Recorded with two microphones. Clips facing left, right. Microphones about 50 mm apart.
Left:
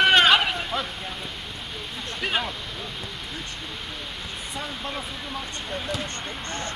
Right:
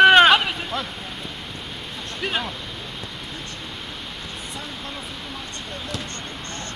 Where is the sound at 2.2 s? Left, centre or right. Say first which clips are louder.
Even; centre.